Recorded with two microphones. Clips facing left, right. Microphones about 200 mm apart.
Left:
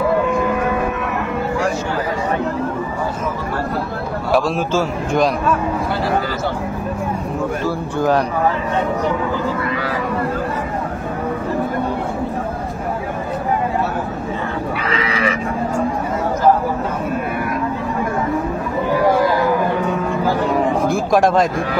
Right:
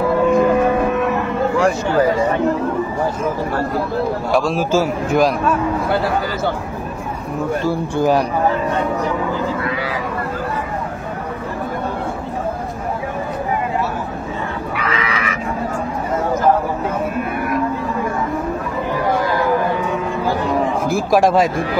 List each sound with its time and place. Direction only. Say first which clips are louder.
4.3 s a man's voice: left 1 dB; centre (ahead or behind)
14.8 s livestock: left 1 dB; 30° left (ahead or behind)
20.9 s a man's voice: right 3 dB; centre (ahead or behind)